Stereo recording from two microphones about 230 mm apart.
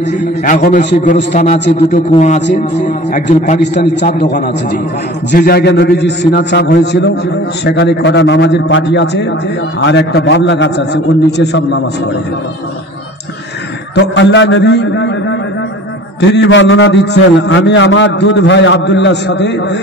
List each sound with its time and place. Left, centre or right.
0.4 s a man's voice: left
1.3 s a man's voice: left
1.6 s a man's voice: left
2.1 s a man's voice: left
13.9 s a man's voice: left